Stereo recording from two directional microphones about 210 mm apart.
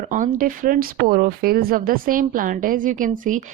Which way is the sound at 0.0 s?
40° right (ahead or behind).